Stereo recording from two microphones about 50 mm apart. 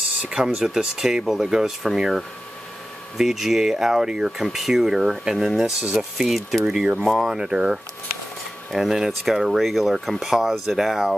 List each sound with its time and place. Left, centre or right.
0.6 s speech: centre
3.2 s speech: centre
8.7 s speech: centre